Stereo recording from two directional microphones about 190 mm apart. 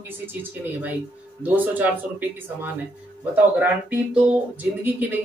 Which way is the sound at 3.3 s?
10° right (ahead or behind).